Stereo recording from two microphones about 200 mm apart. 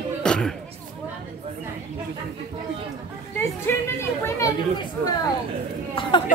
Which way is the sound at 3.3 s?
10° left (ahead or behind).